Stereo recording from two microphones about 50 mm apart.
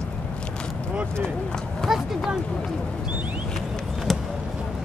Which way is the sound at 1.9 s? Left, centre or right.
Centre.